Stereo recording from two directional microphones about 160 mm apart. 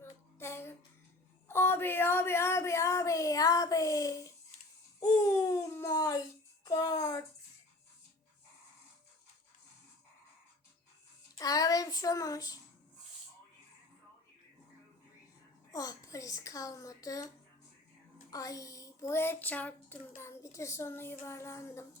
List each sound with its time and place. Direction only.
0.0 s a sound: 15° left (ahead or behind)
11.3 s child singing: 20° left (ahead or behind)
15.7 s a woman's voice: 20° left (ahead or behind)